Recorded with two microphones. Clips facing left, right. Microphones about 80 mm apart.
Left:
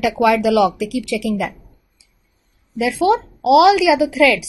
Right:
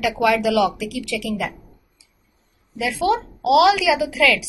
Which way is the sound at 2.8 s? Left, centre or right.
Centre.